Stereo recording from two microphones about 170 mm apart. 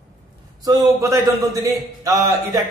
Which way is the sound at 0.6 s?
15° right (ahead or behind).